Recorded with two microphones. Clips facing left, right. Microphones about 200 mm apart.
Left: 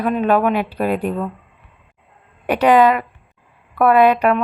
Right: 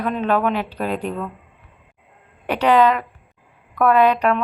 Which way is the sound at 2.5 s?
10° left (ahead or behind).